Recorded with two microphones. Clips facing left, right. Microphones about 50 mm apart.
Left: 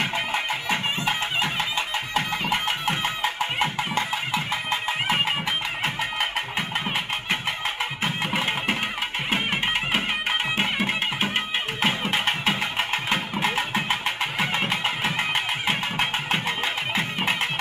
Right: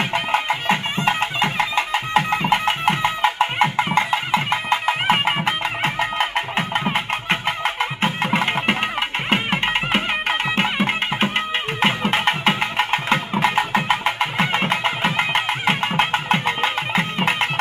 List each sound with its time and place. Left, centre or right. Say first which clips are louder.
0.1 s music: right 6 dB; right
10.6 s music: right 4 dB; right
13.6 s music: right 6 dB; right